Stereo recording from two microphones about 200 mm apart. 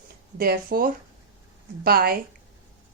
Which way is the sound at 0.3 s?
50° right (ahead or behind).